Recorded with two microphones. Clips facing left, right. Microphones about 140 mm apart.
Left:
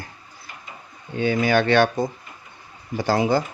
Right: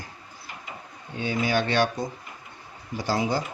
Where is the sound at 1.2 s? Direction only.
65° left (ahead or behind).